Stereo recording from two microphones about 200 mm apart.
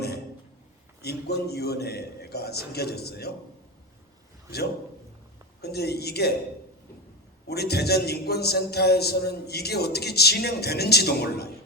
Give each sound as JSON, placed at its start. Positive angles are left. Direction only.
{"t": 1.0, "sound": "a man's voice", "side_deg": 55}
{"t": 5.6, "sound": "a man's voice", "side_deg": 55}
{"t": 7.4, "sound": "a man's voice", "side_deg": 55}